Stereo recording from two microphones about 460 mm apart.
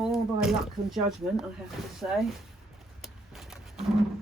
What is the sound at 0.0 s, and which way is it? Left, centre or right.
Speech, centre.